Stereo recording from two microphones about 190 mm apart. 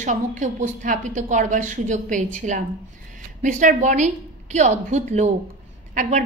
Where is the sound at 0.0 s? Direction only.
40° right (ahead or behind).